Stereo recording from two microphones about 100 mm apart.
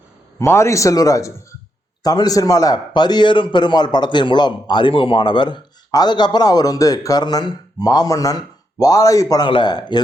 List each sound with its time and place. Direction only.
0.3 s speech: 25° left (ahead or behind)
2.7 s a man's voice: 50° left (ahead or behind)
9.5 s a man's voice: 50° left (ahead or behind)